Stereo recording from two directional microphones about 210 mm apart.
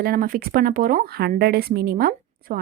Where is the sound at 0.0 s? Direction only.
45° right (ahead or behind).